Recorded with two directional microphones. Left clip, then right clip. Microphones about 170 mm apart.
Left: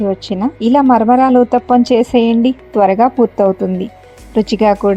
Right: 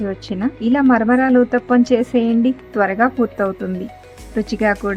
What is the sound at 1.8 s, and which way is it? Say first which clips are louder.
A woman's voice: left 5 dB; 15° left (ahead or behind).